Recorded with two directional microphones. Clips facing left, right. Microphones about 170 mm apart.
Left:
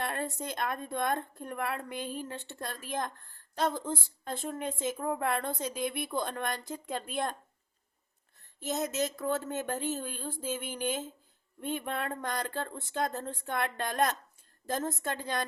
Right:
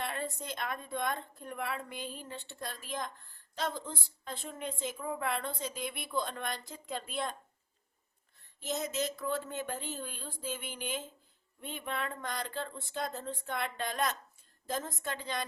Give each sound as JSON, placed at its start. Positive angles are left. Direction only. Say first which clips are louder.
{"t": 0.0, "sound": "a sound", "louder": "left 3 dB", "side_deg": 45}
{"t": 0.4, "sound": "speech", "louder": "left 4 dB", "side_deg": 45}
{"t": 8.6, "sound": "speech", "louder": "left 3 dB", "side_deg": 45}